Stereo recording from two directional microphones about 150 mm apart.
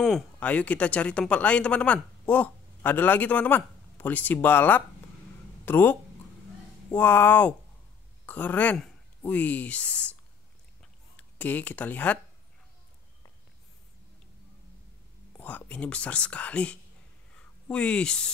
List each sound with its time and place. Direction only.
0.0 s speech: 5° left (ahead or behind)
11.1 s speech: 10° left (ahead or behind)
15.3 s speech: 10° left (ahead or behind)